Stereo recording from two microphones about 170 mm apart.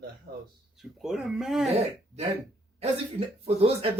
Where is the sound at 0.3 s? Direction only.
55° right (ahead or behind).